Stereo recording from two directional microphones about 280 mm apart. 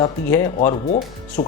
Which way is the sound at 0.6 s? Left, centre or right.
Left.